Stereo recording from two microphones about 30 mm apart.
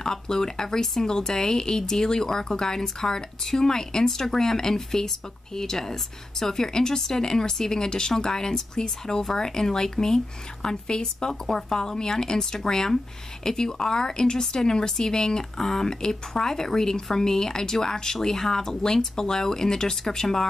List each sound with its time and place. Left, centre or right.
0.0 s speech: left